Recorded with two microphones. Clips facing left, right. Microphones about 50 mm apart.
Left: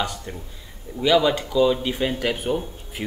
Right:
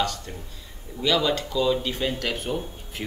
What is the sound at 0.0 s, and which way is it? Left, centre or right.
Speech, centre.